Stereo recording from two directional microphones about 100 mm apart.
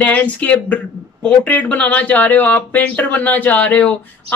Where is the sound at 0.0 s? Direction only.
15° left (ahead or behind).